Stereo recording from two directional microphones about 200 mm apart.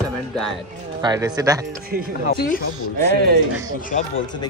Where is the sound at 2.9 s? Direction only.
50° right (ahead or behind).